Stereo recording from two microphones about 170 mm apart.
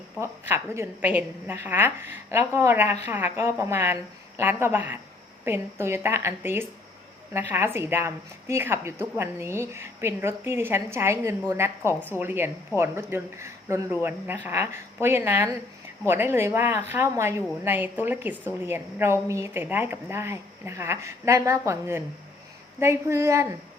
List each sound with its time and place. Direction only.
0.2 s a woman's voice: 15° right (ahead or behind)